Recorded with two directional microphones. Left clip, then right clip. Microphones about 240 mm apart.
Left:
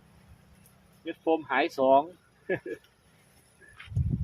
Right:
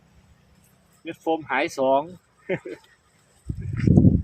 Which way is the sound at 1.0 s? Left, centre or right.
Right.